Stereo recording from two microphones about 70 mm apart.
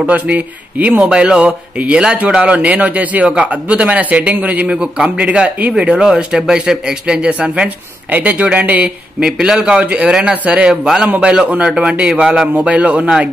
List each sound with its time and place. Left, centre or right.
0.0 s a man's voice: right